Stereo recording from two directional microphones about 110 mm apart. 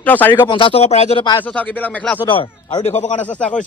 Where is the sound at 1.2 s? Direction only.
45° left (ahead or behind).